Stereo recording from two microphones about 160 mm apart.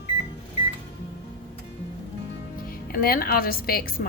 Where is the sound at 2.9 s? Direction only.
65° left (ahead or behind).